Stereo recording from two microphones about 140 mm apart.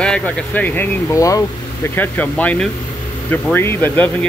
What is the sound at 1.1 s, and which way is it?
Speech, 25° left (ahead or behind).